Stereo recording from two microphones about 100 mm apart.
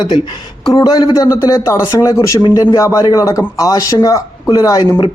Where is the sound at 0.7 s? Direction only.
40° left (ahead or behind).